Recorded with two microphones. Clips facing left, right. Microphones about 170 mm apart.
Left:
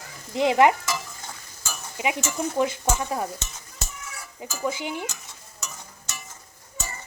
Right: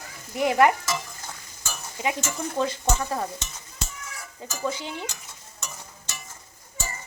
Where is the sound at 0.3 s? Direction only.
20° left (ahead or behind).